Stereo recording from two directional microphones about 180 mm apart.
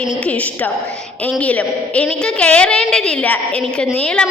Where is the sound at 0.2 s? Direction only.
10° left (ahead or behind).